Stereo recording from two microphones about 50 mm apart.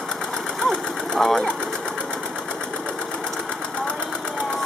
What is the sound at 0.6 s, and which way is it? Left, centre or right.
Sewing machine, centre.